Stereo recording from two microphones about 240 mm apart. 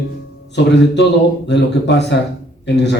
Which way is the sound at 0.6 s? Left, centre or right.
Left.